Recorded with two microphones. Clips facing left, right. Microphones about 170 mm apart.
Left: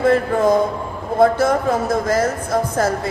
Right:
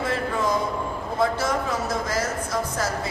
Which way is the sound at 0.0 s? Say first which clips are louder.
Left 10 dB; 55° left (ahead or behind).